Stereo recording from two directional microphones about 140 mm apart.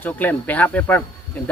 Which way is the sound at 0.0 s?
10° left (ahead or behind).